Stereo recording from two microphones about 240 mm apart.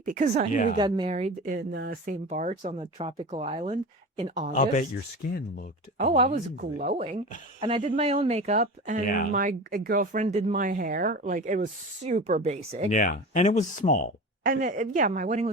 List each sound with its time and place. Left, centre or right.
0.0 s speech: right
0.5 s speech: left
0.8 s speech: centre
1.5 s speech: right
4.5 s speech: left
6.0 s speech: right
9.0 s speech: left
9.3 s speech: right
12.9 s speech: left
14.4 s speech: right